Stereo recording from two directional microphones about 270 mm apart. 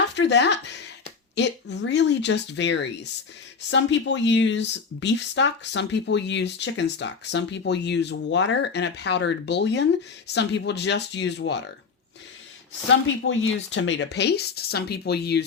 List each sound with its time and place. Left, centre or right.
0.2 s speech: left
13.2 s speech: left